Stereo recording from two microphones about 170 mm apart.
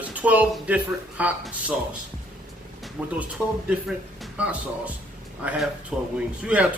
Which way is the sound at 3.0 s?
5° right (ahead or behind).